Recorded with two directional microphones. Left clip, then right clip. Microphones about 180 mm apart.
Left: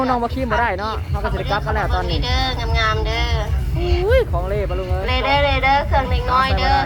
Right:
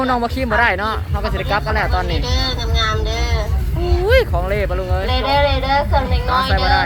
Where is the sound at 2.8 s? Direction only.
30° right (ahead or behind).